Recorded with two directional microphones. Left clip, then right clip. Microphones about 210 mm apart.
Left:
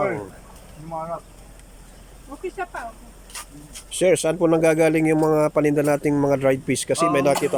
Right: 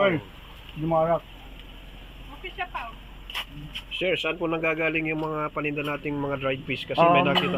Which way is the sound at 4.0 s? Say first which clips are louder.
Left 8 dB; 20° left (ahead or behind).